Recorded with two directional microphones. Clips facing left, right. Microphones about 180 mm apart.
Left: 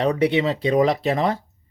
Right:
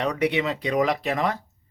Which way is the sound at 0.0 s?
30° left (ahead or behind).